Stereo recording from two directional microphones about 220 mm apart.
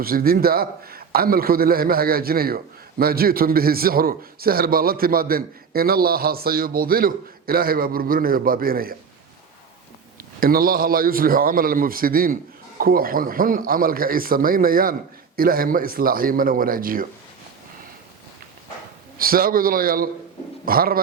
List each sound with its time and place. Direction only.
0.0 s a man's voice: 40° right (ahead or behind)
10.4 s a man's voice: 40° right (ahead or behind)
19.1 s a man's voice: 40° right (ahead or behind)